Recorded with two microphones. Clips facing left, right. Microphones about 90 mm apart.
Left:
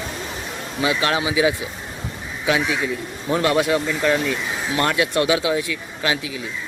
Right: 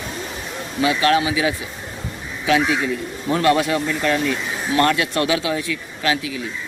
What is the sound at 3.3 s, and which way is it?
A man's voice, 20° left (ahead or behind).